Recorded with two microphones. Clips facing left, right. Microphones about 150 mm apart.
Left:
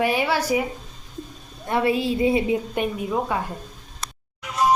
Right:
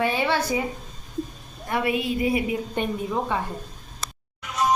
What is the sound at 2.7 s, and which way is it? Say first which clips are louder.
Speech: left 2 dB; 10° left (ahead or behind).